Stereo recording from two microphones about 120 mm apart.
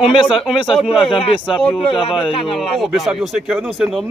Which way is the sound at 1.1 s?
50° left (ahead or behind).